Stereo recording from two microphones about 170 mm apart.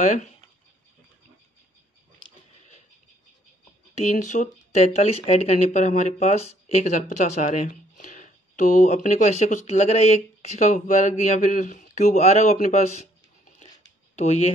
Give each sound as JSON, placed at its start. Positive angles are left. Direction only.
{"t": 0.0, "sound": "speech", "side_deg": 45}
{"t": 3.9, "sound": "speech", "side_deg": 45}
{"t": 14.1, "sound": "speech", "side_deg": 40}